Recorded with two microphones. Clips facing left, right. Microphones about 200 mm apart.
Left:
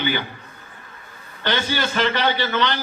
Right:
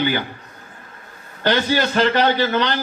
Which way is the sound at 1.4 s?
40° right (ahead or behind).